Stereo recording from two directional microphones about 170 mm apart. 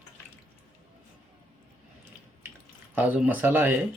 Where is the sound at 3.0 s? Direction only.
10° right (ahead or behind).